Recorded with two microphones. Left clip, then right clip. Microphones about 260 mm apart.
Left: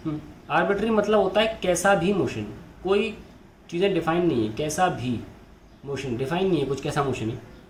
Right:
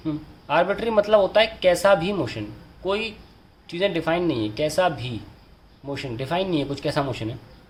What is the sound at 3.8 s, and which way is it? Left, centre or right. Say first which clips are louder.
Speech: right 1 dB; right.